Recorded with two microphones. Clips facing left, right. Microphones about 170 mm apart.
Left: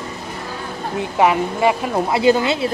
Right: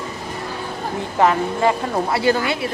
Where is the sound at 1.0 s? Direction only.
10° left (ahead or behind).